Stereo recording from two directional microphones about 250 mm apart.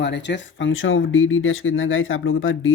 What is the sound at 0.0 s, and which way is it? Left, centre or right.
Speech, left.